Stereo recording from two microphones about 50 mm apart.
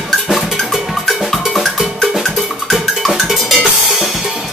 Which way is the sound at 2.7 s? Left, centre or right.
Centre.